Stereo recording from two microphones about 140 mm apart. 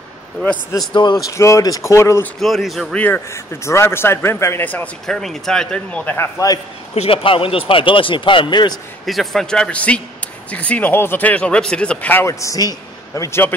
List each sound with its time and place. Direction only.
0.9 s a man's voice: 35° left (ahead or behind)
1.3 s speech: 20° left (ahead or behind)
2.4 s a man's voice: centre (ahead or behind)
5.0 s speech: 5° left (ahead or behind); by 6.6 s 25° left (ahead or behind)
7.0 s a man's voice: 40° left (ahead or behind)
9.0 s a man's voice: centre (ahead or behind); by 13.6 s 15° left (ahead or behind)